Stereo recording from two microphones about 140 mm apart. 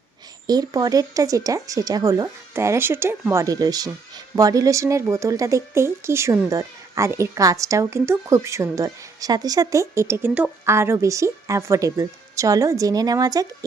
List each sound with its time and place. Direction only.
0.4 s a woman's voice: 30° right (ahead or behind)